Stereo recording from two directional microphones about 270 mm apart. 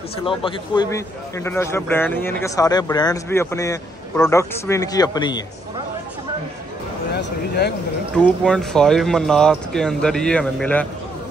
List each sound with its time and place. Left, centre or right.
0.2 s a man's voice: centre
7.1 s speech: left
8.2 s speech: centre